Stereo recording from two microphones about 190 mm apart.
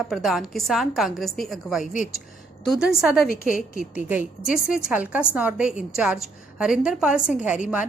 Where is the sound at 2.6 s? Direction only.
Centre (ahead or behind).